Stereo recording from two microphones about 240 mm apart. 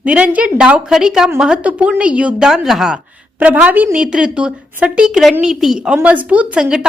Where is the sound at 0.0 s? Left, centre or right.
Centre.